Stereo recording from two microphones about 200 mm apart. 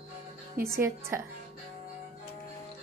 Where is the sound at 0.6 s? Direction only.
15° right (ahead or behind).